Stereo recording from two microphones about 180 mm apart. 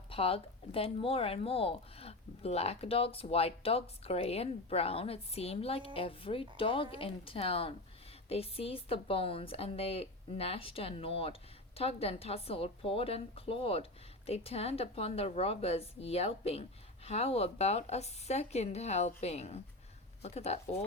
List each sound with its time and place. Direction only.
0.1 s speech: 30° left (ahead or behind)